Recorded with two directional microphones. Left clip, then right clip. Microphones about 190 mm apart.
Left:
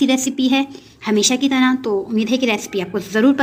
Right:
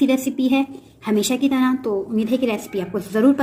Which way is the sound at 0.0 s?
Centre (ahead or behind).